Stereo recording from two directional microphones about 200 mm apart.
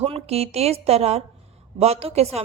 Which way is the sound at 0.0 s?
30° right (ahead or behind).